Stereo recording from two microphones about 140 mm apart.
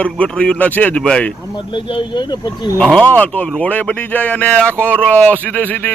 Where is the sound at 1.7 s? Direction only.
35° left (ahead or behind).